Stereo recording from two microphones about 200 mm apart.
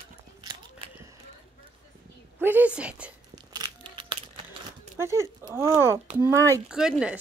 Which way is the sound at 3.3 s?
20° right (ahead or behind).